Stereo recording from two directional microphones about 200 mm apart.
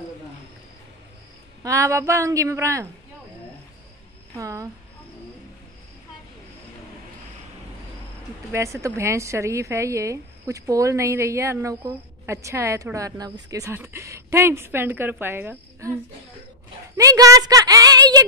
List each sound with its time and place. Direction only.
1.6 s a woman's voice: 15° right (ahead or behind)
4.4 s a sound: 15° right (ahead or behind)
8.5 s a woman's voice: 15° right (ahead or behind)